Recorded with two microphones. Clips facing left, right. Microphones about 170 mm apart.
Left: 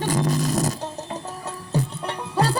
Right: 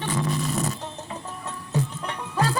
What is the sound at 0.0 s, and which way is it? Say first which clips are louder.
Music: left 4 dB; 40° left (ahead or behind).